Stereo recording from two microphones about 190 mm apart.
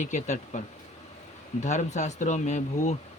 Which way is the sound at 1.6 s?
40° left (ahead or behind).